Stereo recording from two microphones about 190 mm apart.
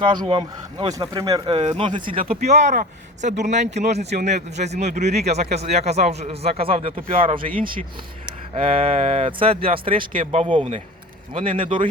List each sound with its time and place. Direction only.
0.0 s speech: 25° right (ahead or behind)
8.5 s speech: 30° right (ahead or behind)